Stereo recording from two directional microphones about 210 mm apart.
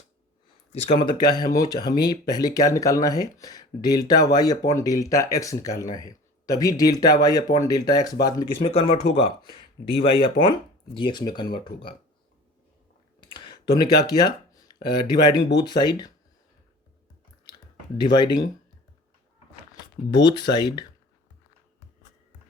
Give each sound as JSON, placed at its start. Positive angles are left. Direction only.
{"t": 0.7, "sound": "speech", "side_deg": 30}
{"t": 8.6, "sound": "speech", "side_deg": 30}
{"t": 13.1, "sound": "speech", "side_deg": 20}
{"t": 17.9, "sound": "speech", "side_deg": 20}
{"t": 19.7, "sound": "speech", "side_deg": 20}